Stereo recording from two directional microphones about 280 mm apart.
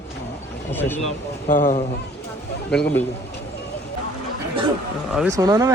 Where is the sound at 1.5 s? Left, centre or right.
Left.